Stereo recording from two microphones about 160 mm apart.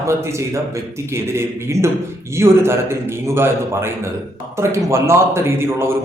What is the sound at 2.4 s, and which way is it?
A man's voice, 15° right (ahead or behind).